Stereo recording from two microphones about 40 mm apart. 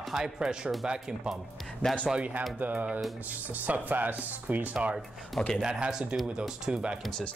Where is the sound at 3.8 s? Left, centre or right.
Right.